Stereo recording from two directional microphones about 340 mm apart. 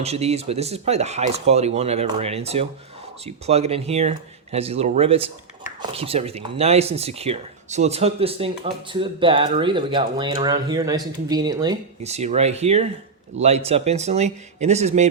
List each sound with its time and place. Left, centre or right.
0.0 s speech: centre